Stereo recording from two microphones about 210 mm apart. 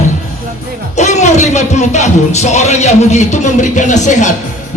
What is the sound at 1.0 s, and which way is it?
Speech, 35° left (ahead or behind).